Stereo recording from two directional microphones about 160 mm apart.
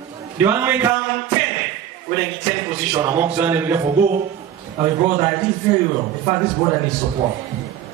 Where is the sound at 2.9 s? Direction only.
10° right (ahead or behind).